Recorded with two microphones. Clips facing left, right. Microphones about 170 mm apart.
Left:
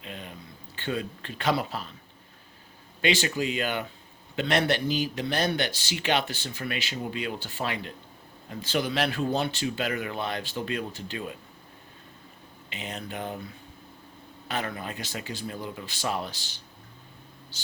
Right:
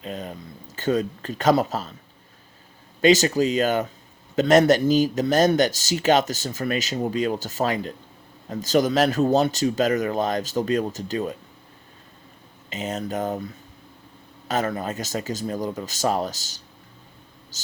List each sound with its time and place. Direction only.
0.0 s a sound: 40° right (ahead or behind)
0.8 s a man's voice: 40° right (ahead or behind)
3.0 s a man's voice: 40° right (ahead or behind)
12.7 s a man's voice: 40° right (ahead or behind)
14.4 s speech: 40° right (ahead or behind)
17.5 s a sound: 40° right (ahead or behind)